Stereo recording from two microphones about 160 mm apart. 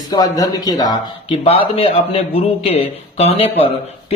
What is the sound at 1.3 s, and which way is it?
A man's voice, 40° left (ahead or behind).